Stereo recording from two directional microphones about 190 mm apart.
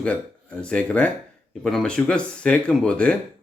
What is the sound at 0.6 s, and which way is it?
Speech, 5° left (ahead or behind).